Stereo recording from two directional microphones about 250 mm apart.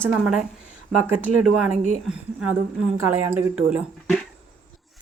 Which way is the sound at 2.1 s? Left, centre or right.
Centre.